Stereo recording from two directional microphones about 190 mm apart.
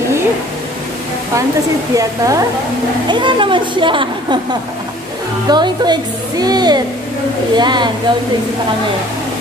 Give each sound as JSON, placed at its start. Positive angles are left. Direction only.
{"t": 2.0, "sound": "a woman's voice", "side_deg": -15}
{"t": 5.5, "sound": "a woman's voice", "side_deg": -20}